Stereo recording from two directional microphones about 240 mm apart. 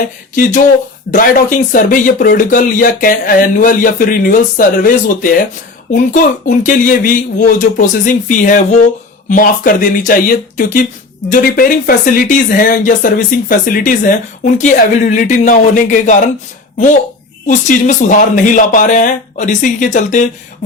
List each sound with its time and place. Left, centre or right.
1.1 s speech: left